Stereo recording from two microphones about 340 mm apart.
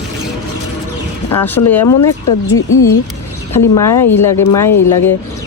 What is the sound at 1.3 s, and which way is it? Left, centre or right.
Speech, centre.